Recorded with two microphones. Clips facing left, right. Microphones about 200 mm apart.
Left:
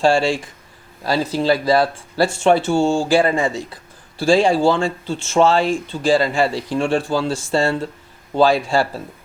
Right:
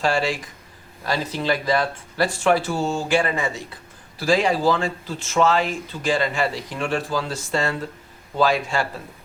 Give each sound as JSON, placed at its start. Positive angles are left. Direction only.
{"t": 0.0, "sound": "speech", "side_deg": 30}